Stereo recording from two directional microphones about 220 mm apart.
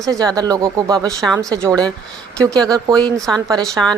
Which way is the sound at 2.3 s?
5° left (ahead or behind).